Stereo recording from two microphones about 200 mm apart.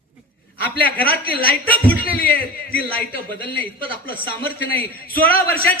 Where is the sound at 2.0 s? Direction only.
45° left (ahead or behind).